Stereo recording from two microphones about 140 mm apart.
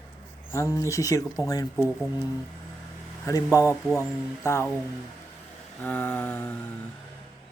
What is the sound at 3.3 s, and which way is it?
Speech, 20° left (ahead or behind).